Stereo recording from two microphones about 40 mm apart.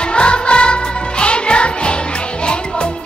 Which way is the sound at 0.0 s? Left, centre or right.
Left.